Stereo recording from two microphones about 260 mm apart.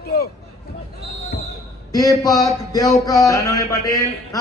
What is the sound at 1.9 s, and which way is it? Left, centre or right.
A man's voice, centre.